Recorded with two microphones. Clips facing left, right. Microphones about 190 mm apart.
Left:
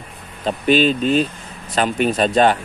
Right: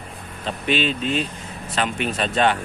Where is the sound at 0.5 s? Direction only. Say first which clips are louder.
Left 7 dB; 40° left (ahead or behind).